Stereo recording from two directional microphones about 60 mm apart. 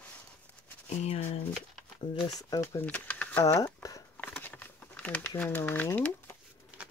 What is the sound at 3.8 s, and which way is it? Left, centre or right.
Speech, left.